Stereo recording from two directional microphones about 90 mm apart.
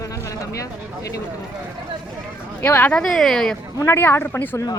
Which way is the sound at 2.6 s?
20° left (ahead or behind).